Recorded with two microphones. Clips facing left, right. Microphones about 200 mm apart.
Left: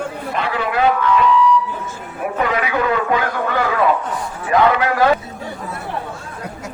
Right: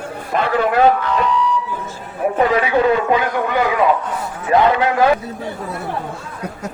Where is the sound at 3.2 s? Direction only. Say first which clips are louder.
Right 2 dB; 20° right (ahead or behind).